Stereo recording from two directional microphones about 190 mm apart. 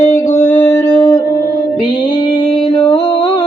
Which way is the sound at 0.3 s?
40° left (ahead or behind).